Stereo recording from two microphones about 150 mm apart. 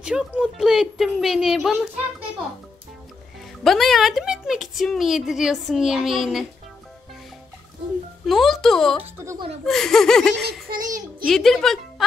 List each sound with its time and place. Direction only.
0.0 s a woman's voice: 5° right (ahead or behind)
3.6 s a woman's voice: centre (ahead or behind)
8.3 s a woman's voice: centre (ahead or behind)
9.0 s speech: 20° right (ahead or behind)
9.7 s a woman's voice: 5° left (ahead or behind)
10.8 s a child's voice: 60° right (ahead or behind)
11.2 s a woman's voice: centre (ahead or behind)